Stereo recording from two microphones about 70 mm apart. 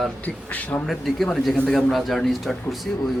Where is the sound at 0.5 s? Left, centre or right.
Left.